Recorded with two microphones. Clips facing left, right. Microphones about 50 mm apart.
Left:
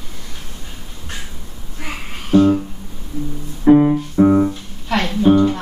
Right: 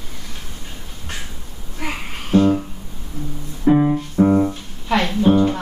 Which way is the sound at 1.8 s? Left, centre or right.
Right.